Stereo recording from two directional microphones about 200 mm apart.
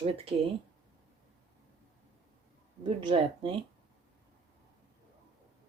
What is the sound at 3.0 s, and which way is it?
Speech, 25° right (ahead or behind).